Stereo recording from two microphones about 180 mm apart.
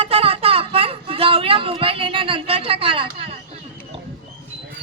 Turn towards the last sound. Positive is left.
turn(degrees=-30)  # may be behind; listen again after turning